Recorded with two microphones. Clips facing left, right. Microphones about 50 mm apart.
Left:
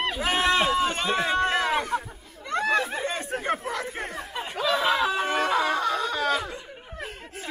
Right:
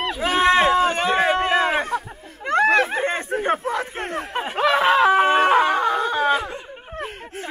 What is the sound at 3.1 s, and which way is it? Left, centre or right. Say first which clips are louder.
Speech: right 6 dB; right.